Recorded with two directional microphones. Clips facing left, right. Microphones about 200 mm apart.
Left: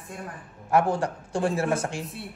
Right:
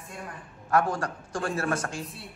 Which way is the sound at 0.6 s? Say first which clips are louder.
Left 3 dB; 25° left (ahead or behind).